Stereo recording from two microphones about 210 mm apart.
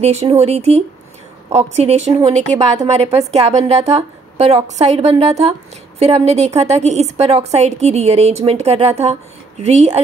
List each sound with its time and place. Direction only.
0.0 s a woman's voice: 30° right (ahead or behind)